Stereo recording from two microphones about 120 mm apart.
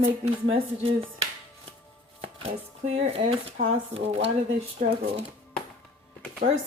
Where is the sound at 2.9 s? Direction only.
55° right (ahead or behind).